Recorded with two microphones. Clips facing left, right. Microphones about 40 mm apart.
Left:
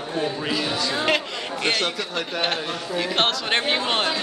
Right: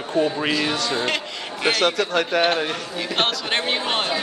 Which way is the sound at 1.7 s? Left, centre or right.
Right.